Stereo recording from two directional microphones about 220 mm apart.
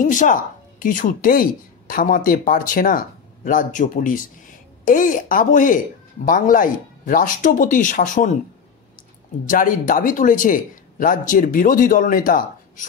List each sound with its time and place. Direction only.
0.1 s speech: 35° left (ahead or behind)
9.5 s speech: 35° left (ahead or behind)